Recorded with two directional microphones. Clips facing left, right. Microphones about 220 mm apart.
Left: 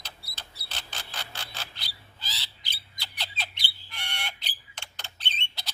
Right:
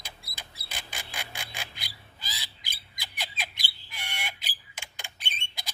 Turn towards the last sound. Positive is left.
turn(degrees=-10)  # may be behind; listen again after turning